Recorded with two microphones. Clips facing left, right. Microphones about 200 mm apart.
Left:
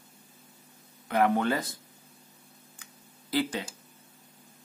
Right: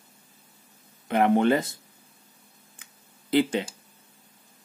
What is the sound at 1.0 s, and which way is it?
Speech, 25° right (ahead or behind).